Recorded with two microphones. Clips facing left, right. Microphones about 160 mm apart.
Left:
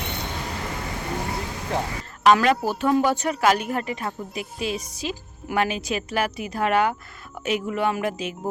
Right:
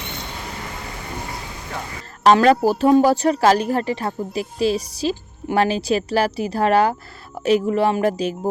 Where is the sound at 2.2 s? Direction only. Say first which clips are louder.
Right 5 dB; 35° right (ahead or behind).